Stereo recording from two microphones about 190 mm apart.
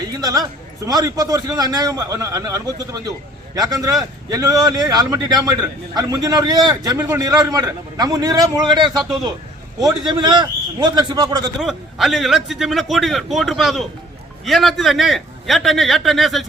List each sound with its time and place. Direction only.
0.1 s a man's voice: 20° right (ahead or behind)
9.0 s a man's voice: centre (ahead or behind)
9.8 s a man's voice: 25° right (ahead or behind)
11.6 s a man's voice: centre (ahead or behind)